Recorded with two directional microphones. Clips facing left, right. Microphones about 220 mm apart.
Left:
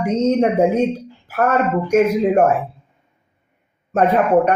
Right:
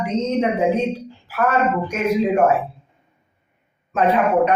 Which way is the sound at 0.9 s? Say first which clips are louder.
Left 1 dB; 50° left (ahead or behind).